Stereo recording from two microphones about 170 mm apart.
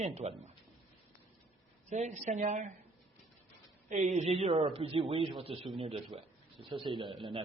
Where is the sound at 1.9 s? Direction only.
45° right (ahead or behind).